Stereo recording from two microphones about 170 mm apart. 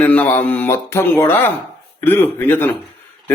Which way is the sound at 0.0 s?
10° left (ahead or behind).